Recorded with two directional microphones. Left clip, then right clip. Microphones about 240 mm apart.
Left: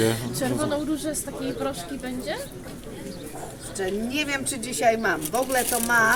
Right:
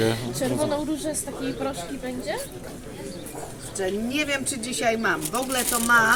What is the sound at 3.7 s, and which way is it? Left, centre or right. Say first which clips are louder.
Speech: right 1 dB; centre.